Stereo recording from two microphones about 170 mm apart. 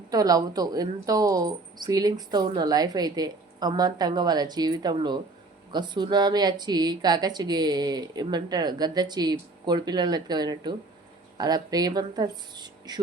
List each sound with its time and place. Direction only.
0.1 s speech: 20° right (ahead or behind)